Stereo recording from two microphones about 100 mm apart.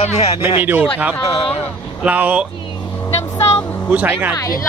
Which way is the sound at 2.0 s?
15° right (ahead or behind).